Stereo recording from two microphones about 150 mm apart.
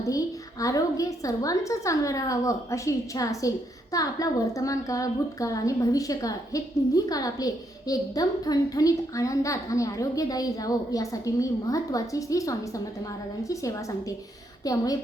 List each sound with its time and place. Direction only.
0.6 s a woman's voice: 20° left (ahead or behind)